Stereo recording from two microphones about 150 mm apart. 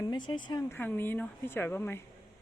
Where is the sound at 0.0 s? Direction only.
30° left (ahead or behind).